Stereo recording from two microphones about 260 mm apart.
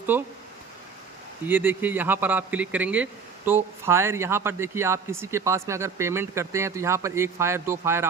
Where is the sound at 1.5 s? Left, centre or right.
Centre.